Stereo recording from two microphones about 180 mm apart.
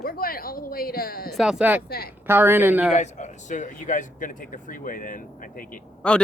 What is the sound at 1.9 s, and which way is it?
Speech, 60° left (ahead or behind).